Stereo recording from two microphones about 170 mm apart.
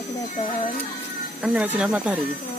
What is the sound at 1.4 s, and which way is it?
Speech, 5° right (ahead or behind).